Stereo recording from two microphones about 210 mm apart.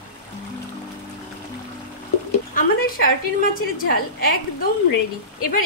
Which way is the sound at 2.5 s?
45° left (ahead or behind).